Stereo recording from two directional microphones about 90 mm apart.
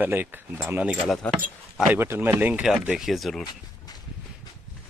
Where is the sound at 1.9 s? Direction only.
25° right (ahead or behind).